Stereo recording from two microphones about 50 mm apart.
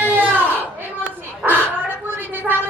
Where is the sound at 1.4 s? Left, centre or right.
Right.